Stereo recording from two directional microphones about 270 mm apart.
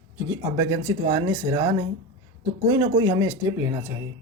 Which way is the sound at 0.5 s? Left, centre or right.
Centre.